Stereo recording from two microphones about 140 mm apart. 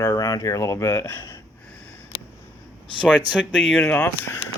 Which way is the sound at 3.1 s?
10° right (ahead or behind).